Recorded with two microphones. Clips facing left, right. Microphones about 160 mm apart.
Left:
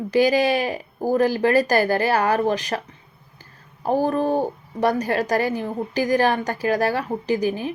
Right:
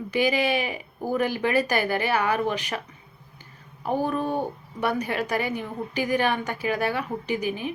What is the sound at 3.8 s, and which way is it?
A woman's voice, 35° left (ahead or behind).